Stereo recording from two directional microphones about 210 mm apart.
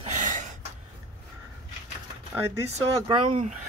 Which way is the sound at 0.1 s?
35° right (ahead or behind).